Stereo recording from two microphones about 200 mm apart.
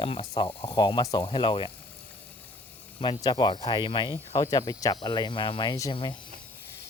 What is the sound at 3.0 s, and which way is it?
Speech, 20° left (ahead or behind).